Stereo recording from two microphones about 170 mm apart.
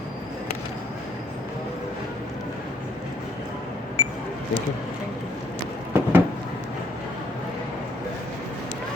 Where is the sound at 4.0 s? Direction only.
30° left (ahead or behind).